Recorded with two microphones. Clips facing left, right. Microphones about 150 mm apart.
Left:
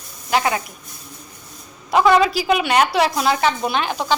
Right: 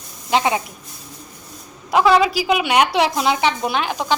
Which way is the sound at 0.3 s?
20° right (ahead or behind).